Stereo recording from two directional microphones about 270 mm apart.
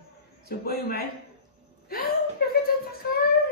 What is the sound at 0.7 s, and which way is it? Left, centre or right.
A man's voice, left.